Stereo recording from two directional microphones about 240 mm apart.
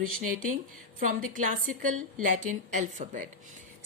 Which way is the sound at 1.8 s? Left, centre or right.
Right.